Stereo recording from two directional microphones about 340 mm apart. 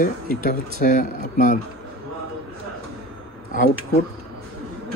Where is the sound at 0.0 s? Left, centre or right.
Left.